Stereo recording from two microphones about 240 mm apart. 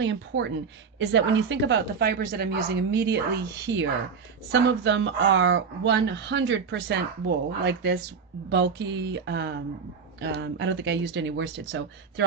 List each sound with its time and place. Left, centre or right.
0.0 s speech: right